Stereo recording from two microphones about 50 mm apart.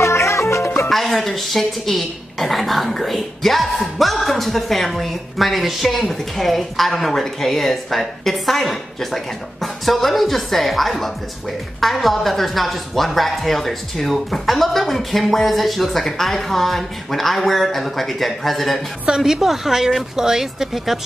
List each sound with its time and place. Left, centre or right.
0.0 s music: left
0.8 s speech: centre
19.0 s a woman's voice: centre